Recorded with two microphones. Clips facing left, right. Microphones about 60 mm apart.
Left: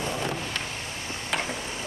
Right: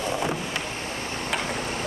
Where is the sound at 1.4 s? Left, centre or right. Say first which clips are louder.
Right 4 dB; right.